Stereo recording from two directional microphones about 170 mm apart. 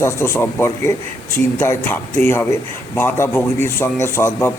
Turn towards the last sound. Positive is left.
turn(degrees=15)  # may be behind; listen again after turning